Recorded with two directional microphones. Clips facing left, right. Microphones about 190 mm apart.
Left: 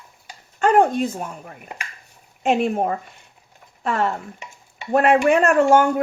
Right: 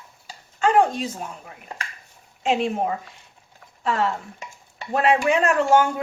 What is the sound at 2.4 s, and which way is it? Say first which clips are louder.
Speech: left 3 dB; 50° left (ahead or behind).